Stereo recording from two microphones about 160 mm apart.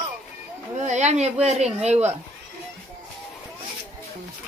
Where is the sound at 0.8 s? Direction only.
45° right (ahead or behind).